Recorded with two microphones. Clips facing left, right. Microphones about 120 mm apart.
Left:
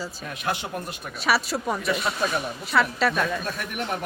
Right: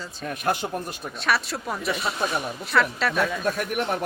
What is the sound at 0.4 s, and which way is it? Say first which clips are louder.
Speech: right 3 dB; 40° right (ahead or behind).